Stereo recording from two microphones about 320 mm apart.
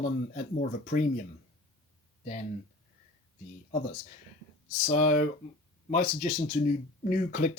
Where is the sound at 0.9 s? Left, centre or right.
Left.